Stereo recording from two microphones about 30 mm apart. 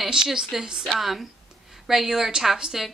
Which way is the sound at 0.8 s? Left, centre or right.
Centre.